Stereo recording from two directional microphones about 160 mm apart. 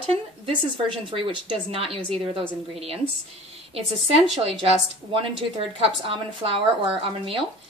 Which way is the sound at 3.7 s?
40° right (ahead or behind).